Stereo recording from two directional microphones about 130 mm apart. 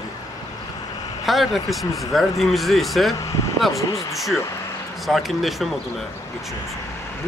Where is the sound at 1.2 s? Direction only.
Centre (ahead or behind).